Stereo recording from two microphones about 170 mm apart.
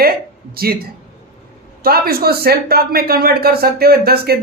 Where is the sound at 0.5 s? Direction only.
65° right (ahead or behind).